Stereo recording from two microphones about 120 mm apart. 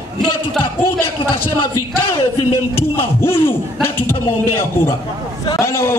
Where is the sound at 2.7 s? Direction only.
20° left (ahead or behind).